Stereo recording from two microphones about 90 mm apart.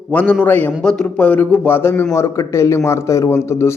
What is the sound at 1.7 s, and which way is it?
A man's voice, 25° left (ahead or behind).